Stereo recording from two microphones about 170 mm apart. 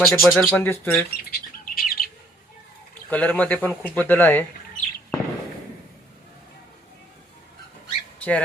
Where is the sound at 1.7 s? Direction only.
60° left (ahead or behind).